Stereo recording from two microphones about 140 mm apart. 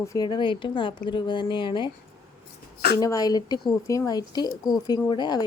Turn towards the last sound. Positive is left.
turn(degrees=30)  # may be behind; listen again after turning